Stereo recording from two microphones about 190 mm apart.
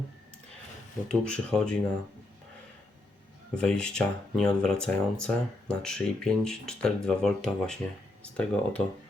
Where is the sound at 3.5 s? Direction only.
5° left (ahead or behind).